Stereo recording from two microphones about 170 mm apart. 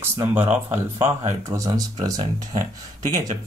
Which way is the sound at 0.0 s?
15° right (ahead or behind).